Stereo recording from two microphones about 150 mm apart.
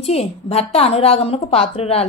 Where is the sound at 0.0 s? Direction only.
45° left (ahead or behind).